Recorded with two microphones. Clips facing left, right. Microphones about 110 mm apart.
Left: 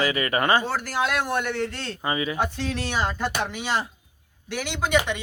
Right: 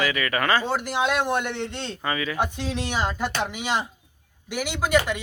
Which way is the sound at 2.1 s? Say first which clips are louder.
Left 1 dB; 20° left (ahead or behind).